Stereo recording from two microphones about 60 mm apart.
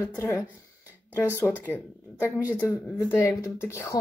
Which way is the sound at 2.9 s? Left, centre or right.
Left.